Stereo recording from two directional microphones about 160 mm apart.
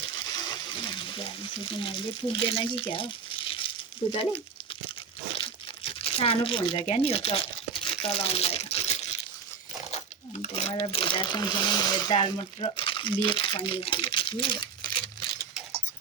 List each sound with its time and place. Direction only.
0.4 s speech: 30° left (ahead or behind)
3.6 s a sound: 30° left (ahead or behind)
4.1 s speech: 35° left (ahead or behind)
5.3 s crumpling: 35° left (ahead or behind)
9.9 s speech: 45° left (ahead or behind)